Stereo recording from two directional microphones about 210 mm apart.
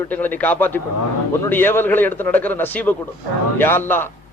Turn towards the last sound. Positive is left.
turn(degrees=10)  # may be behind; listen again after turning